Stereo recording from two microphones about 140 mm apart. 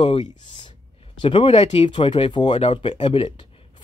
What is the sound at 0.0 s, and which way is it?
Speech, 40° left (ahead or behind).